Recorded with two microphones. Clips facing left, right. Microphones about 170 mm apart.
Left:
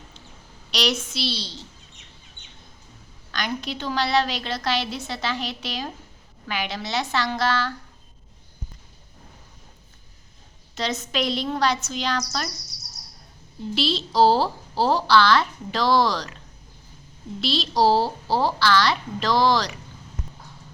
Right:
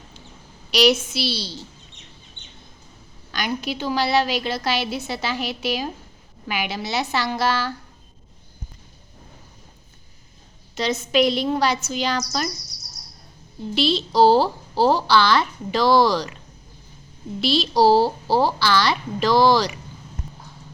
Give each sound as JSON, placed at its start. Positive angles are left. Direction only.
{"t": 0.7, "sound": "a woman's voice", "side_deg": -5}
{"t": 2.4, "sound": "bird", "side_deg": -30}
{"t": 3.3, "sound": "a woman's voice", "side_deg": -5}
{"t": 10.8, "sound": "a woman's voice", "side_deg": 0}
{"t": 13.7, "sound": "a woman's voice", "side_deg": 0}
{"t": 17.4, "sound": "a woman's voice", "side_deg": 0}